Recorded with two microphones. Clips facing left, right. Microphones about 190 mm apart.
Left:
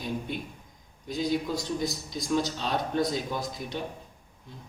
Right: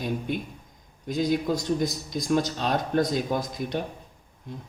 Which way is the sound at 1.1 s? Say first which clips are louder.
Right 4 dB; 45° right (ahead or behind).